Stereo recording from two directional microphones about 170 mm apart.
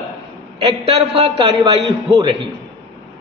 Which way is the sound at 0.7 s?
30° right (ahead or behind).